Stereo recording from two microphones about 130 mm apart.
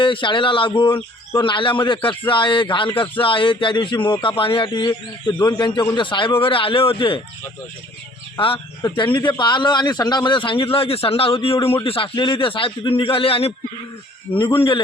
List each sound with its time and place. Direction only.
0.0 s a man's voice: 40° left (ahead or behind)
8.4 s a man's voice: 40° left (ahead or behind)